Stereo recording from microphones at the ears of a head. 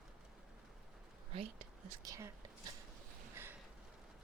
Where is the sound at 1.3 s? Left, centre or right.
Right.